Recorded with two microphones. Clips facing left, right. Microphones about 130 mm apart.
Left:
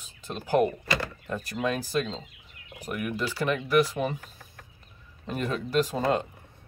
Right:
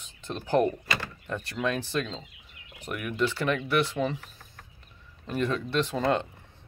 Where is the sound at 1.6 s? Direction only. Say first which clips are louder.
Left 1 dB; 35° left (ahead or behind).